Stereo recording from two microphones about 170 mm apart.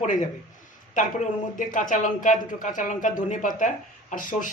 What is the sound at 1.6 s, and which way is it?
Speech, 50° left (ahead or behind).